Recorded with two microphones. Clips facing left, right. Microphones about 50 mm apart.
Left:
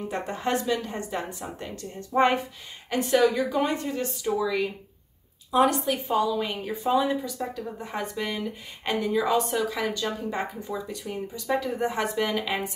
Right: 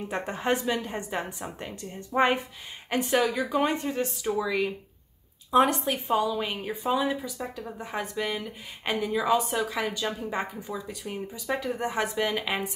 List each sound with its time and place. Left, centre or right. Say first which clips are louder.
0.1 s a woman's voice: right 1 dB; right
3.6 s a woman's voice: even; right; by 12.5 s centre